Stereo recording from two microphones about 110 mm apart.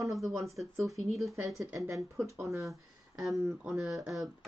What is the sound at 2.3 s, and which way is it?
Speech, 25° right (ahead or behind).